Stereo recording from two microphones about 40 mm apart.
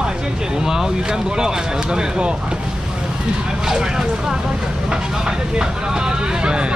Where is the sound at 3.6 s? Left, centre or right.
Centre.